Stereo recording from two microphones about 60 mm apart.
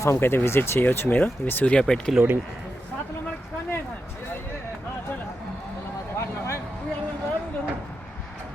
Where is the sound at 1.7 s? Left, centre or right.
Centre.